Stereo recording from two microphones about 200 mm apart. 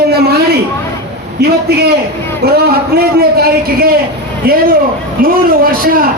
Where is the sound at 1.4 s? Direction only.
50° right (ahead or behind).